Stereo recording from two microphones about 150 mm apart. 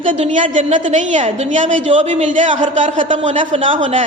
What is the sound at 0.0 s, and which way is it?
A woman's voice, 55° right (ahead or behind).